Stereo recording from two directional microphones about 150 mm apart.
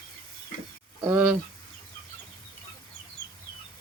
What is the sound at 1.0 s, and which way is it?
Speech, 10° right (ahead or behind).